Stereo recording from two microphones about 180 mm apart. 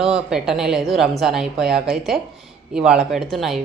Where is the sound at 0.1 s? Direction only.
5° right (ahead or behind).